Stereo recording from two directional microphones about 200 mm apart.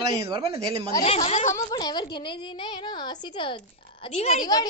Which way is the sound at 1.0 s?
30° left (ahead or behind).